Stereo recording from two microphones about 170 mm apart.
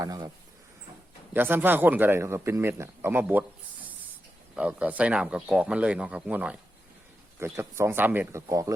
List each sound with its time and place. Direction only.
0.0 s a sound: 20° right (ahead or behind)
1.3 s speech: 10° right (ahead or behind)
4.5 s speech: 10° right (ahead or behind)